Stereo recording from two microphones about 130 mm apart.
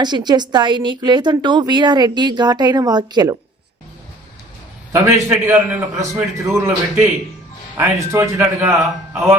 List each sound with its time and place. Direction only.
0.0 s a woman's voice: 35° right (ahead or behind)
4.9 s a man's voice: 20° right (ahead or behind)
8.1 s a man's voice: 20° right (ahead or behind)